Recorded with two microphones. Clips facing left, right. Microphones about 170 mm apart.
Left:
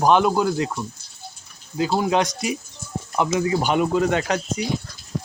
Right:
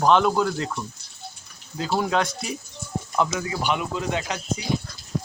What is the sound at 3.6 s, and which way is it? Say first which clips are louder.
Speech: left 4 dB; 45° left (ahead or behind).